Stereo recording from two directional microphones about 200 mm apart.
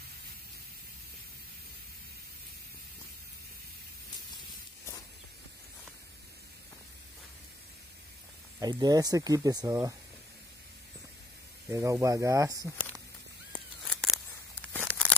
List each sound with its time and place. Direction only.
8.5 s speech: 20° right (ahead or behind)
11.7 s speech: 15° right (ahead or behind)
13.8 s scissors: centre (ahead or behind)